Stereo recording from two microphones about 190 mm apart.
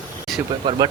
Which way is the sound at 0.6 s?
25° right (ahead or behind).